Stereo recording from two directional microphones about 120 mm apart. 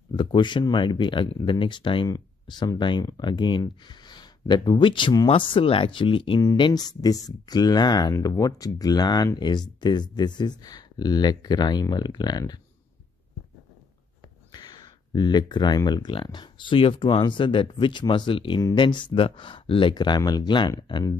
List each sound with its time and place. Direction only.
0.1 s speech: 40° left (ahead or behind)
14.5 s speech: 35° left (ahead or behind)